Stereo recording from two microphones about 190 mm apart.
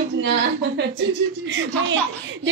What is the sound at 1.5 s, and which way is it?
Speech, 75° right (ahead or behind).